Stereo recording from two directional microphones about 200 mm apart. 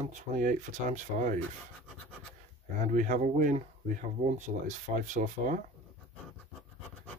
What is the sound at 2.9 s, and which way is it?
Speech, 40° right (ahead or behind).